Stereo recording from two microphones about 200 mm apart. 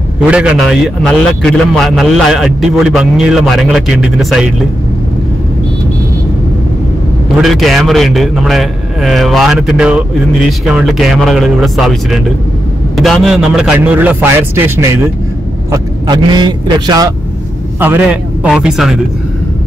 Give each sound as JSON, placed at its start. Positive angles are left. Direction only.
{"t": 0.3, "sound": "a man's voice", "side_deg": -5}
{"t": 7.4, "sound": "a man's voice", "side_deg": 0}
{"t": 15.7, "sound": "speech", "side_deg": -20}
{"t": 17.7, "sound": "a man's voice", "side_deg": -10}